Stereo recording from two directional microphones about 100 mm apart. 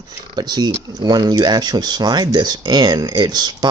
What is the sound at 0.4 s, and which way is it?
Speech, 45° right (ahead or behind).